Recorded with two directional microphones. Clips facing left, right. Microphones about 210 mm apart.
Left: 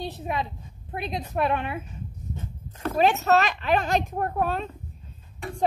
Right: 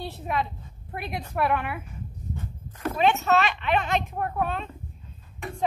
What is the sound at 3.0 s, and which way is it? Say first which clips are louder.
A woman's voice: left 2 dB; 40° left (ahead or behind).